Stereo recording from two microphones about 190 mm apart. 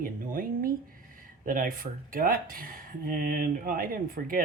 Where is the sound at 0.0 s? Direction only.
50° right (ahead or behind).